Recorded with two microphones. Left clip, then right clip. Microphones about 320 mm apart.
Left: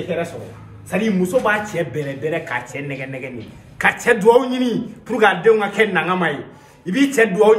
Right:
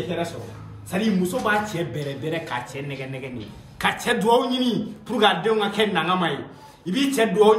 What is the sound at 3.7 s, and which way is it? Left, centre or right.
A man's voice, centre.